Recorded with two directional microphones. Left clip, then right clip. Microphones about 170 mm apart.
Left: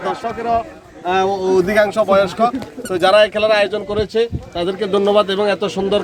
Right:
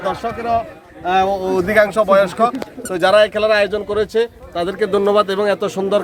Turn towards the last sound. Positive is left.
turn(degrees=-10)  # may be behind; listen again after turning